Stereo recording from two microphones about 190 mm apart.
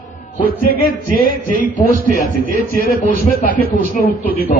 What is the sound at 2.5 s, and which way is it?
Speech, 50° right (ahead or behind).